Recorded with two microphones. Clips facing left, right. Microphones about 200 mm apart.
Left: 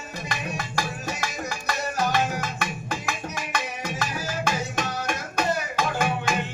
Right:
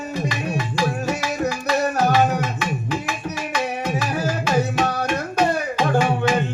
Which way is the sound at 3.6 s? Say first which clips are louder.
Right 7 dB; 60° right (ahead or behind).